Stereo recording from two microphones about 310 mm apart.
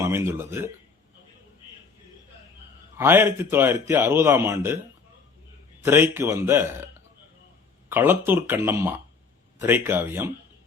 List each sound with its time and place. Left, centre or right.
0.0 s speech: centre
3.0 s speech: centre
5.8 s speech: centre
7.9 s speech: centre